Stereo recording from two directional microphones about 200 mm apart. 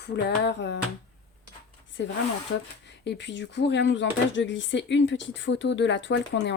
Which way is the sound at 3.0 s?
60° left (ahead or behind).